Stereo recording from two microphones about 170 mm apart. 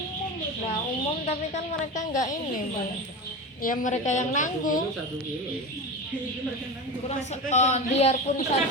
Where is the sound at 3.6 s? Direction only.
50° left (ahead or behind).